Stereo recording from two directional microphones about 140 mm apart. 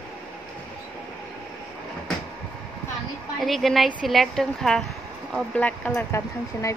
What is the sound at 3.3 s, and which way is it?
A woman's voice, centre (ahead or behind).